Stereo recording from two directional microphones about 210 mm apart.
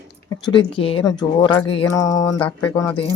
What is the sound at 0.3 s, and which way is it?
Speech, 20° left (ahead or behind).